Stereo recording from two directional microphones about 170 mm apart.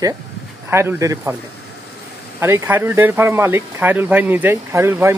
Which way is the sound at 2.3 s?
15° right (ahead or behind).